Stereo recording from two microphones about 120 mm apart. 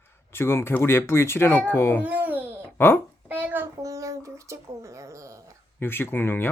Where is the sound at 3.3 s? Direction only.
15° right (ahead or behind).